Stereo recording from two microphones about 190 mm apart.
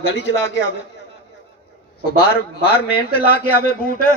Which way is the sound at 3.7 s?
50° left (ahead or behind).